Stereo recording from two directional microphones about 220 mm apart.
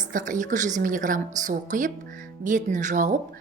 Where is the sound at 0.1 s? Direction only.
35° right (ahead or behind).